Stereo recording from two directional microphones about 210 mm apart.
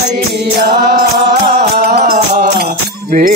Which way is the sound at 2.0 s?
40° right (ahead or behind).